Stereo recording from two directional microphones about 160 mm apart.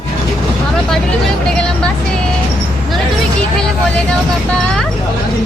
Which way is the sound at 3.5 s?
5° left (ahead or behind).